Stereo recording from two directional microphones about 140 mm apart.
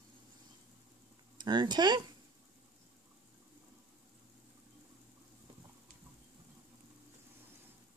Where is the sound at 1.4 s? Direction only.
30° right (ahead or behind).